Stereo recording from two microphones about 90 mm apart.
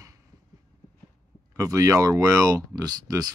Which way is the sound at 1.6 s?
35° right (ahead or behind).